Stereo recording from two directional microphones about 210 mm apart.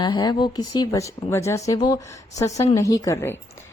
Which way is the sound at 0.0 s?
20° left (ahead or behind).